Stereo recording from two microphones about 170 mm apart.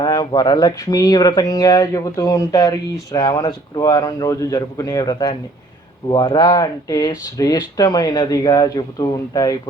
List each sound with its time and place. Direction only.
0.0 s speech: 25° left (ahead or behind)